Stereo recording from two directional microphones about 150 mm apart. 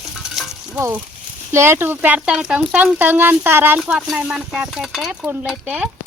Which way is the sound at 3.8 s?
5° right (ahead or behind).